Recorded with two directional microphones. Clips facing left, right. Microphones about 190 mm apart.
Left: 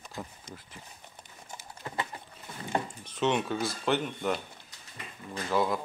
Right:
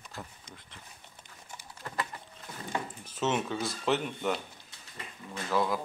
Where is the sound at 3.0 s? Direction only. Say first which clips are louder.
Left 1 dB; 5° right (ahead or behind).